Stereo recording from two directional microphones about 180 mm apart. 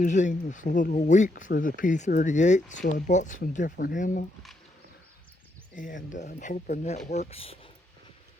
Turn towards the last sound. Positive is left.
turn(degrees=30)  # may be behind; listen again after turning